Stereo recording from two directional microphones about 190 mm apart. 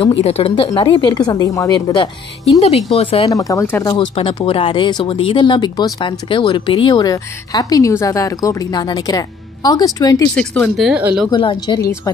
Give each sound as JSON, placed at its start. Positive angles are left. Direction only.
{"t": 0.0, "sound": "speech", "side_deg": 30}
{"t": 2.6, "sound": "speech", "side_deg": 30}
{"t": 3.3, "sound": "speech", "side_deg": 15}
{"t": 10.3, "sound": "speech", "side_deg": 5}
{"t": 10.9, "sound": "speech", "side_deg": -5}
{"t": 11.2, "sound": "speech", "side_deg": 20}